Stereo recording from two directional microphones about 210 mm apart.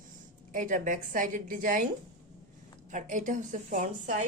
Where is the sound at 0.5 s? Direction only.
40° right (ahead or behind).